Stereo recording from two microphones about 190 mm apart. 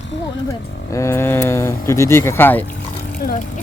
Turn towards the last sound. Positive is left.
turn(degrees=50)  # may be behind; listen again after turning